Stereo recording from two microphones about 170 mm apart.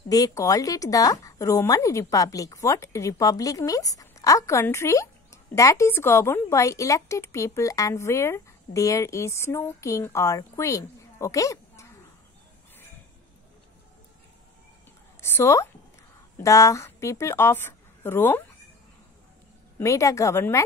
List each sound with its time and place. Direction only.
0.1 s a woman's voice: 20° left (ahead or behind)
15.1 s a woman's voice: 15° left (ahead or behind)
19.8 s a woman's voice: 20° left (ahead or behind)